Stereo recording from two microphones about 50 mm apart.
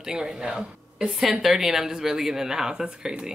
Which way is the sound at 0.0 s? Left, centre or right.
Centre.